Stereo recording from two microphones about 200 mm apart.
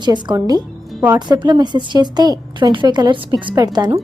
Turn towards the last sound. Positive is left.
turn(degrees=-20)  # may be behind; listen again after turning